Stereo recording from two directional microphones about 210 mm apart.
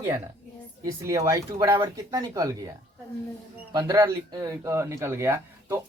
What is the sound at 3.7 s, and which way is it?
Speech, 15° right (ahead or behind).